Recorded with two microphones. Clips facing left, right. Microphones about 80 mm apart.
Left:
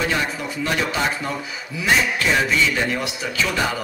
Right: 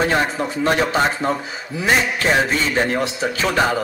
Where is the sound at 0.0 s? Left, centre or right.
Right.